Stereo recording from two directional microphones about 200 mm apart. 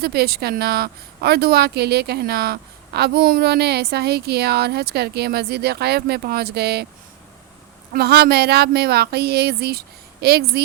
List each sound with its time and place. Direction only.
0.0 s a woman's voice: 50° right (ahead or behind)
7.9 s a woman's voice: 50° right (ahead or behind)